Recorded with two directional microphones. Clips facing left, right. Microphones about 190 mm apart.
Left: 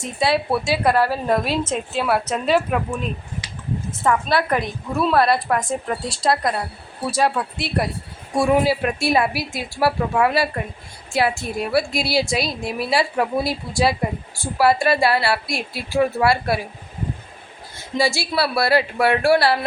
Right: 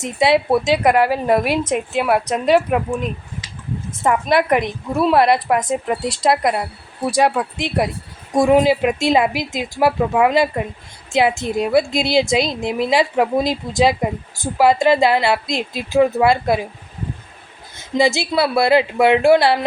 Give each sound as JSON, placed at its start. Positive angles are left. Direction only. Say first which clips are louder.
{"t": 0.0, "sound": "a woman's voice", "louder": "right 5 dB", "side_deg": -20}
{"t": 17.7, "sound": "a woman's voice", "louder": "right 4 dB", "side_deg": -20}